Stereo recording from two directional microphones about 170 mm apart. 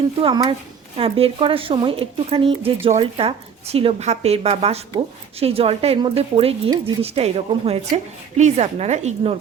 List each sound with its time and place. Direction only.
0.2 s a woman's voice: 30° right (ahead or behind)